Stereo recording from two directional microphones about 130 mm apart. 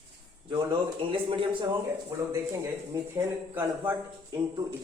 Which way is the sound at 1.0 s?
40° right (ahead or behind).